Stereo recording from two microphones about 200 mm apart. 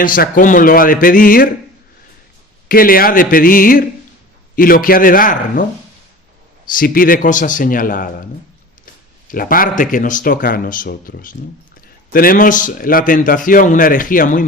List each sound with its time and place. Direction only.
0.0 s a man's voice: 45° left (ahead or behind)
2.6 s a man's voice: 45° left (ahead or behind)
6.7 s a man's voice: 45° left (ahead or behind)
9.3 s a man's voice: 45° left (ahead or behind)